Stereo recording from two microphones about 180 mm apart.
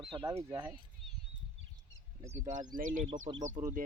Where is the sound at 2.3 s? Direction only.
45° right (ahead or behind).